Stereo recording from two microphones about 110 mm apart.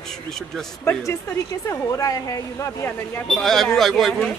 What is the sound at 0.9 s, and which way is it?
Speech, 30° left (ahead or behind).